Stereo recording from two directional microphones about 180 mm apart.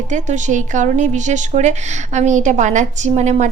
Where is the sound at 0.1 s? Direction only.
45° right (ahead or behind).